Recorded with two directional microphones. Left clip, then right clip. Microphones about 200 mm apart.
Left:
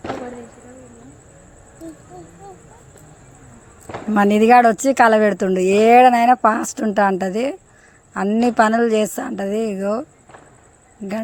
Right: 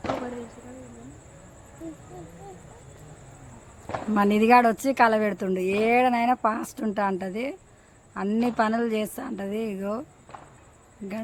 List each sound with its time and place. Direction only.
4.1 s speech: 25° left (ahead or behind)